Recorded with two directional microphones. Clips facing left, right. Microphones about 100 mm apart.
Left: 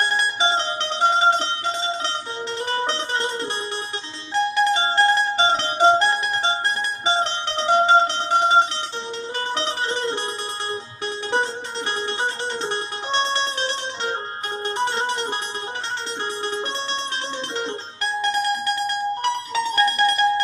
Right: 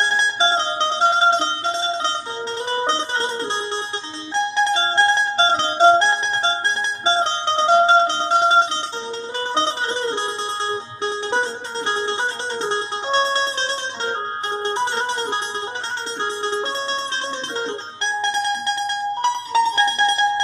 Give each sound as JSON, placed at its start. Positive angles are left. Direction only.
{"t": 0.1, "sound": "music", "side_deg": -25}
{"t": 4.5, "sound": "mandolin", "side_deg": -25}
{"t": 7.0, "sound": "music", "side_deg": -25}
{"t": 16.5, "sound": "music", "side_deg": -25}
{"t": 18.0, "sound": "music", "side_deg": -25}